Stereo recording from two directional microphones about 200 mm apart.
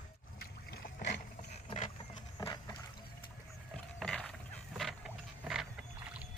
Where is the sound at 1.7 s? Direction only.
35° left (ahead or behind).